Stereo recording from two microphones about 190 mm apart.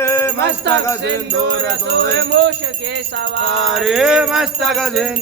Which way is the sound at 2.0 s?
65° right (ahead or behind).